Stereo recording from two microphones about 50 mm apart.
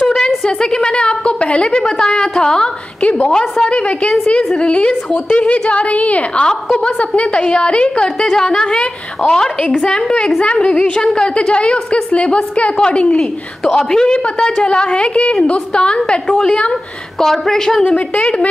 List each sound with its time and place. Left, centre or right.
0.0 s a sound: centre
0.4 s a woman's voice: centre
3.0 s a woman's voice: left
3.3 s a woman's voice: centre
17.2 s a woman's voice: centre
17.8 s a woman's voice: left